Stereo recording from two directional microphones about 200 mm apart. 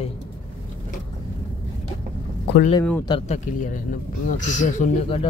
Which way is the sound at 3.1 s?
35° left (ahead or behind).